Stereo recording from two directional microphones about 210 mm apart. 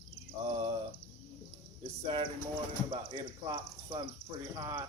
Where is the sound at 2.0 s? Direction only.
25° right (ahead or behind).